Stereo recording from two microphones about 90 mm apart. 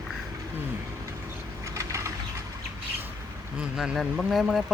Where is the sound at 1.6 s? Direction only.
35° right (ahead or behind).